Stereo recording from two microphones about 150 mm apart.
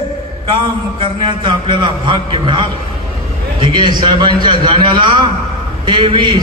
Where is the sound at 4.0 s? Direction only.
30° right (ahead or behind).